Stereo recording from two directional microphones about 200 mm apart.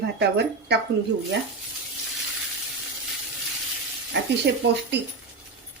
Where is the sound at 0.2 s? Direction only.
60° right (ahead or behind).